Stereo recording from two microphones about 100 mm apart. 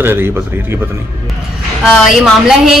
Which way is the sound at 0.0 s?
20° right (ahead or behind).